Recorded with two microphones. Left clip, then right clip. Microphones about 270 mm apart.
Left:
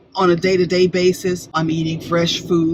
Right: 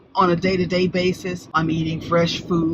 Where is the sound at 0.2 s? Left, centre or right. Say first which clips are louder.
Left 3 dB; centre.